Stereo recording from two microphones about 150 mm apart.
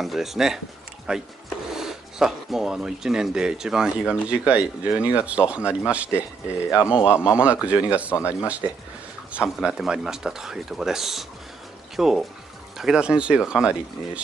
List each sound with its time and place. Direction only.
0.0 s speech: centre (ahead or behind)
6.7 s a man's voice: 20° left (ahead or behind)
7.3 s speech: 10° right (ahead or behind)
8.2 s a man's voice: 20° left (ahead or behind)
9.3 s speech: 5° right (ahead or behind)